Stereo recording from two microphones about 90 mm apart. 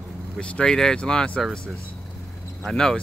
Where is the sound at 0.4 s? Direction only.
10° left (ahead or behind).